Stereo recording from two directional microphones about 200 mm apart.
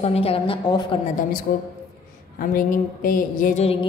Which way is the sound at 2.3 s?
45° left (ahead or behind).